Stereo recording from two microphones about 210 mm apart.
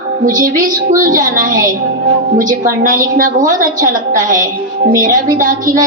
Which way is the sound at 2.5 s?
40° right (ahead or behind).